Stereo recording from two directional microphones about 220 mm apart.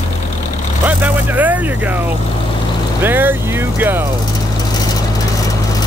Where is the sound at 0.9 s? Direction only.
10° right (ahead or behind).